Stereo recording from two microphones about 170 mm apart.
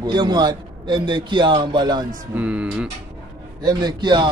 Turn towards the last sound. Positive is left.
turn(degrees=-25)  # may be behind; listen again after turning